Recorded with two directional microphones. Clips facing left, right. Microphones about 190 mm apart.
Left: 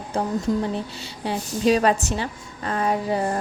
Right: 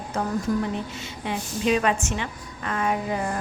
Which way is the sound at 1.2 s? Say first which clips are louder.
Left 4 dB; 35° left (ahead or behind).